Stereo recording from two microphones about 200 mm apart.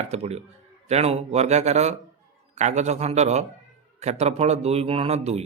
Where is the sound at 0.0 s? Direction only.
30° right (ahead or behind).